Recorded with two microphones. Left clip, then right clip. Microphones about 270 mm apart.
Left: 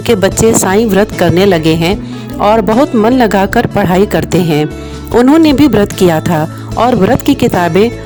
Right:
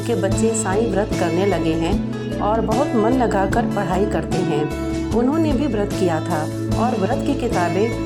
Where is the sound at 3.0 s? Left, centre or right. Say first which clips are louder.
Left 9 dB; left.